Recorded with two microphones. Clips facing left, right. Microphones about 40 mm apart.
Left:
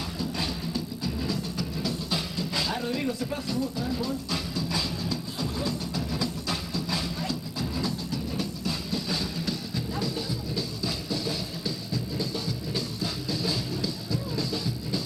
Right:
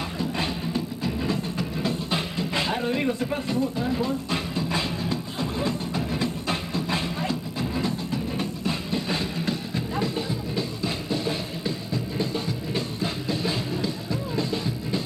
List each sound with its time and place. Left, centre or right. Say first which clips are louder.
0.2 s music: right 4 dB; right